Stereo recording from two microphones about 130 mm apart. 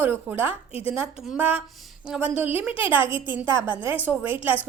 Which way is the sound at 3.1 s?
40° left (ahead or behind).